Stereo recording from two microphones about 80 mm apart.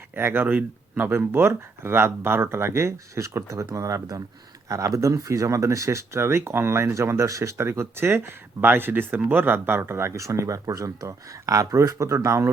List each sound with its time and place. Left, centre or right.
0.2 s speech: right